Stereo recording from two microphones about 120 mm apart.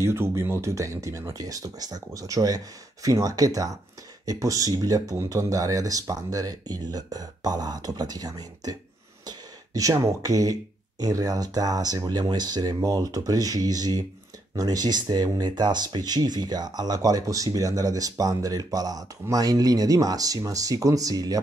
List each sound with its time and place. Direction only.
0.0 s speech: 25° right (ahead or behind)